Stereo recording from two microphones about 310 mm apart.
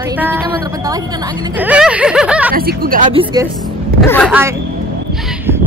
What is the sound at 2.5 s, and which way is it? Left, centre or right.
Speech, right.